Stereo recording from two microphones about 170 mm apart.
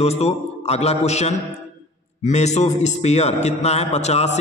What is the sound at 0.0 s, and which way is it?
A man's voice, 40° left (ahead or behind).